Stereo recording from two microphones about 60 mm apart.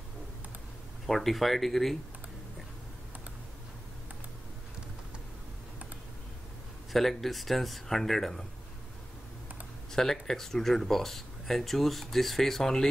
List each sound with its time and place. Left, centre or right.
1.0 s speech: centre
6.9 s speech: centre
9.9 s speech: centre